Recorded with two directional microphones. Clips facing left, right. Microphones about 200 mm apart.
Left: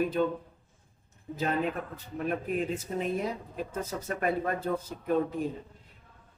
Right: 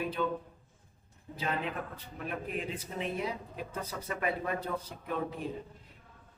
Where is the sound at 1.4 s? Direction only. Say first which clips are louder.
Left 6 dB; 45° left (ahead or behind).